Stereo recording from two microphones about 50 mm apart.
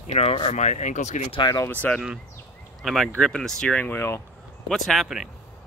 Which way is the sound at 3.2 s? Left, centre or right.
Centre.